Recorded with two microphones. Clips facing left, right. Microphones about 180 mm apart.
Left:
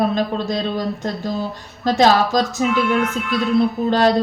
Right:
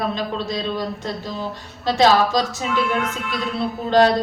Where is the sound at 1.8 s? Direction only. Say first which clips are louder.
Left 2 dB; 45° left (ahead or behind).